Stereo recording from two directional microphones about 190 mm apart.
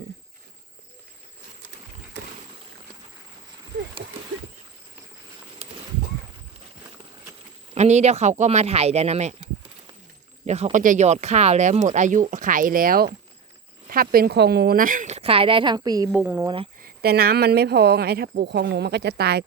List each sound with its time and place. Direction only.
3.7 s a sound: 65° right (ahead or behind)
7.8 s speech: 35° right (ahead or behind); by 16.5 s 10° right (ahead or behind)
16.8 s speech: 55° right (ahead or behind)